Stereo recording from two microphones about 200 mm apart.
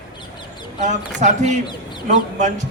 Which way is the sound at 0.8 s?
35° right (ahead or behind).